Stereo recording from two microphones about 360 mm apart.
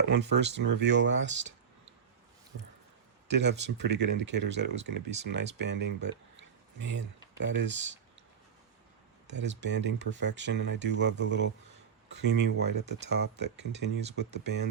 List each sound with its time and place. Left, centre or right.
0.2 s speech: right
3.2 s speech: right
6.3 s a sound: right
7.6 s speech: right
9.2 s speech: right